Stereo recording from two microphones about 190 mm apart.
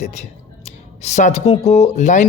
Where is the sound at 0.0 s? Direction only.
35° left (ahead or behind).